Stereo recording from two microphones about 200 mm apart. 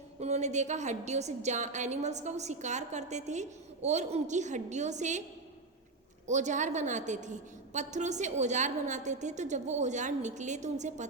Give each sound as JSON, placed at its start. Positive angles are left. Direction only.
{"t": 0.2, "sound": "a woman's voice", "side_deg": -35}
{"t": 6.2, "sound": "a woman's voice", "side_deg": -35}